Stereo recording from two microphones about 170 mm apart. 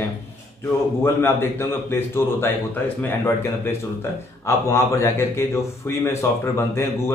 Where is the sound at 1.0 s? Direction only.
15° left (ahead or behind).